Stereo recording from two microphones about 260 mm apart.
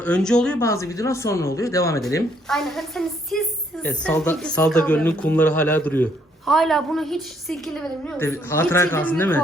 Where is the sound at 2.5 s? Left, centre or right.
Centre.